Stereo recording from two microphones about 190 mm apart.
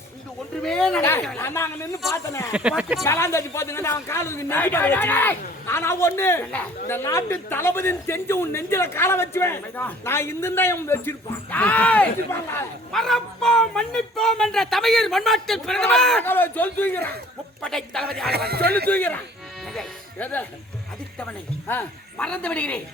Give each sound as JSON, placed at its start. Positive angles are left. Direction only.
{"t": 0.6, "sound": "speech", "side_deg": 5}
{"t": 2.5, "sound": "speech", "side_deg": -5}
{"t": 3.0, "sound": "speech", "side_deg": 15}
{"t": 18.3, "sound": "speech", "side_deg": -55}
{"t": 18.9, "sound": "speech", "side_deg": 10}